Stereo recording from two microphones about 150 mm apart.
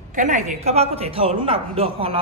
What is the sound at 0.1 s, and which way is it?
A woman's voice, 55° right (ahead or behind).